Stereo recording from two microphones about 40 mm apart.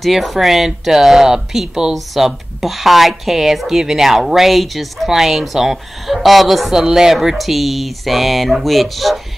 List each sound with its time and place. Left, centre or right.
0.0 s speech: centre
6.7 s speech: centre